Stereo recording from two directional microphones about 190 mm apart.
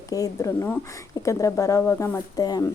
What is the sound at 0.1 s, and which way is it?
A woman's voice, 15° left (ahead or behind).